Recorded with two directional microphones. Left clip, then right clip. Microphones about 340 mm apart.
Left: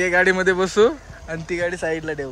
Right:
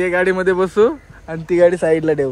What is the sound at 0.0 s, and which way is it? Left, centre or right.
A man's voice, centre.